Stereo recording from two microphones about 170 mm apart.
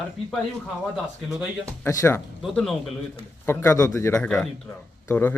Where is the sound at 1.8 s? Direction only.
15° left (ahead or behind).